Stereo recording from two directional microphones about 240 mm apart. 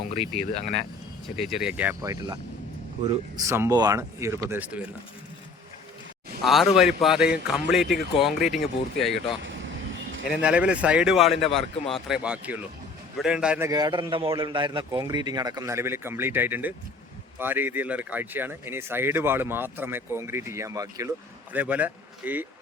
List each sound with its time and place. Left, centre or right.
0.1 s speech: left
1.4 s speech: centre
6.4 s speech: centre
10.2 s a man's voice: centre